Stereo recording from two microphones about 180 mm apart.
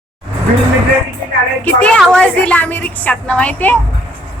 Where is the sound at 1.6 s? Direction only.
5° left (ahead or behind).